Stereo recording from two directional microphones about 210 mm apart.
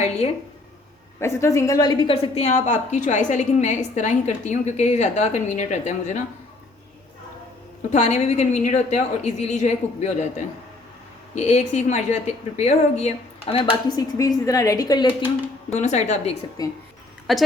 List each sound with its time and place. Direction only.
1.2 s a woman's voice: 15° left (ahead or behind); by 6.2 s 35° left (ahead or behind)
7.9 s a woman's voice: 35° left (ahead or behind)
11.3 s a woman's voice: 35° left (ahead or behind)
15.7 s a woman's voice: 35° left (ahead or behind)
16.6 s speech: 15° left (ahead or behind)
17.3 s a woman's voice: centre (ahead or behind)